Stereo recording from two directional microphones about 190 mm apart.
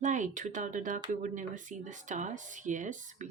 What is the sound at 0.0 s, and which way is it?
Speech, 40° right (ahead or behind).